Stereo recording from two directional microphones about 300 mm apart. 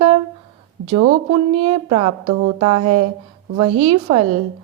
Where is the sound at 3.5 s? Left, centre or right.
Centre.